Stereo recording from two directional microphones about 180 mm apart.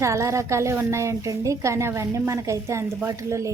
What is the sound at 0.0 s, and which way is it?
Speech, 15° right (ahead or behind).